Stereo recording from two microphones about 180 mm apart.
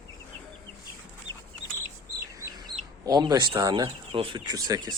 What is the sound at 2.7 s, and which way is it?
Bird, 25° right (ahead or behind).